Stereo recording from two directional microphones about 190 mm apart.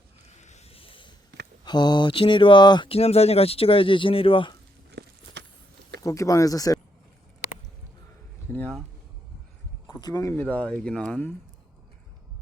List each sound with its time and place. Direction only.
0.3 s a sound: 35° left (ahead or behind)
1.6 s speech: 25° left (ahead or behind)
4.9 s walk: 65° right (ahead or behind)
6.0 s speech: 15° left (ahead or behind)
8.5 s a sound: 10° left (ahead or behind)
9.8 s speech: 20° left (ahead or behind)